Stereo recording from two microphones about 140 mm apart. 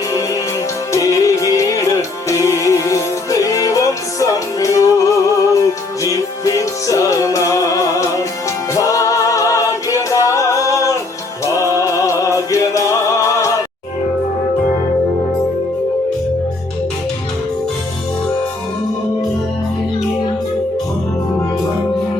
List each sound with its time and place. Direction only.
0.9 s music: 25° left (ahead or behind)